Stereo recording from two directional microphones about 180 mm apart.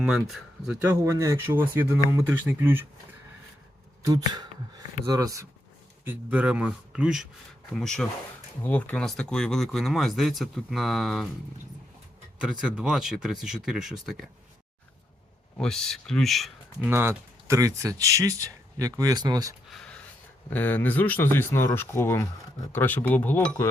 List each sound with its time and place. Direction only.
0.0 s speech: 5° right (ahead or behind)
5.0 s speech: 20° right (ahead or behind)
6.1 s speech: 5° right (ahead or behind)
12.4 s speech: 5° right (ahead or behind)
15.5 s speech: 5° left (ahead or behind)
16.9 s speech: 10° right (ahead or behind)
19.7 s a sound: 5° left (ahead or behind)
20.5 s speech: 10° left (ahead or behind)